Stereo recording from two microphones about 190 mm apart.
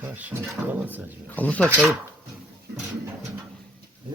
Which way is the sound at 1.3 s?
10° left (ahead or behind).